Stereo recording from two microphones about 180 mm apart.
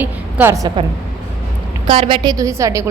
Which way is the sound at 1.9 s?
25° right (ahead or behind).